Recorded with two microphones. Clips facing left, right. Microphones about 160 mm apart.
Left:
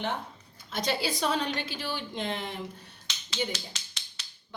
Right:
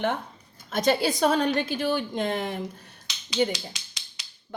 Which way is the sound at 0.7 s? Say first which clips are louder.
Right 7 dB; 50° right (ahead or behind).